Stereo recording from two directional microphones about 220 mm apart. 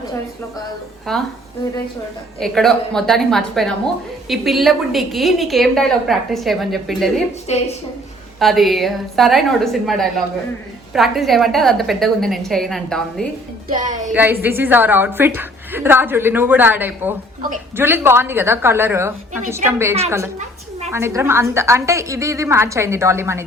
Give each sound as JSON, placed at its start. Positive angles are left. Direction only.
{"t": 1.1, "sound": "a woman's voice", "side_deg": 0}
{"t": 2.4, "sound": "a woman's voice", "side_deg": 0}
{"t": 7.5, "sound": "a woman's voice", "side_deg": 30}
{"t": 8.4, "sound": "a woman's voice", "side_deg": 0}
{"t": 13.7, "sound": "a woman's voice", "side_deg": -35}
{"t": 14.1, "sound": "a woman's voice", "side_deg": -10}